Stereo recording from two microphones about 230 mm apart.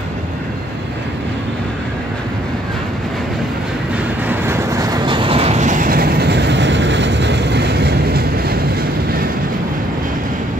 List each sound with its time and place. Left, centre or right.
4.3 s train: centre; by 8.5 s right